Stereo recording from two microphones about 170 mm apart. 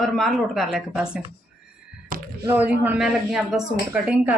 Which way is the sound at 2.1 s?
55° right (ahead or behind).